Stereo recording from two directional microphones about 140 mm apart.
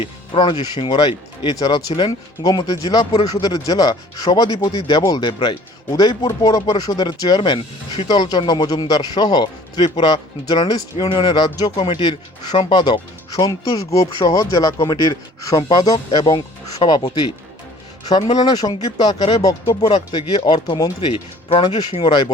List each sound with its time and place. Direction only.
0.0 s speech: 30° left (ahead or behind)
18.1 s speech: 35° left (ahead or behind)